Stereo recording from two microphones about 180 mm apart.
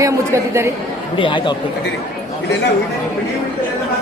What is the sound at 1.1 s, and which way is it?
Speech, 30° left (ahead or behind).